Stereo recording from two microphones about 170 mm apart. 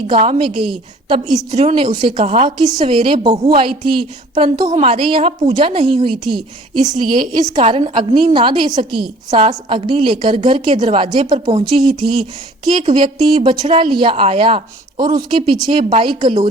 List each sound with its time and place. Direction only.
0.1 s a woman's voice: 35° right (ahead or behind)
2.1 s a woman's voice: 40° right (ahead or behind)
2.6 s a woman's voice: 25° right (ahead or behind)
6.9 s a woman's voice: 55° right (ahead or behind)
7.6 s a woman's voice: 35° right (ahead or behind)